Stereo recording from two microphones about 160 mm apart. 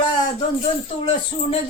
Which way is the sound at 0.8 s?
45° left (ahead or behind).